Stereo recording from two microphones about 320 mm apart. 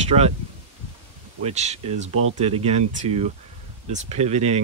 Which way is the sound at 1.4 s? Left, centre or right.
Right.